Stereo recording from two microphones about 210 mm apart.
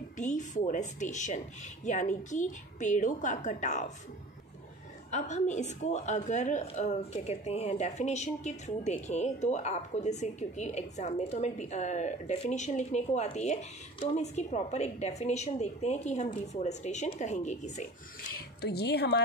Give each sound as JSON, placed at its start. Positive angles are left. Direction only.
{"t": 0.2, "sound": "a woman's voice", "side_deg": 35}
{"t": 5.1, "sound": "a woman's voice", "side_deg": 35}